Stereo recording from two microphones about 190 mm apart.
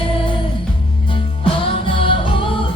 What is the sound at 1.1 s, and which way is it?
Music, 30° left (ahead or behind).